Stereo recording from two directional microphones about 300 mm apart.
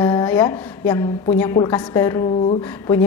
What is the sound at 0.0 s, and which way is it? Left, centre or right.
A woman's voice, centre.